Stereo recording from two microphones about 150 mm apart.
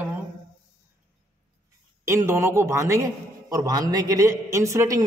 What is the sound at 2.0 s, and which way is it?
A woman's voice, 20° right (ahead or behind).